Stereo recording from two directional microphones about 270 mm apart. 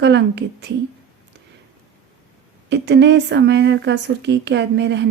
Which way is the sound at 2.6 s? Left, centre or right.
Right.